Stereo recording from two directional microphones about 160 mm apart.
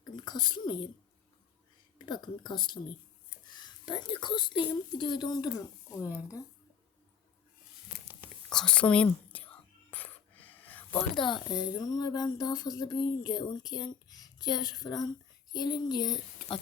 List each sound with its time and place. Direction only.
0.0 s speech: 25° left (ahead or behind)
2.0 s speech: 25° left (ahead or behind)
8.4 s whispering: 5° left (ahead or behind)
11.3 s speech: 25° left (ahead or behind)